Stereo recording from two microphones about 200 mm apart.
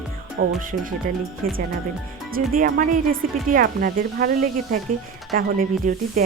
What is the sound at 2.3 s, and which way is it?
Speech, 45° right (ahead or behind).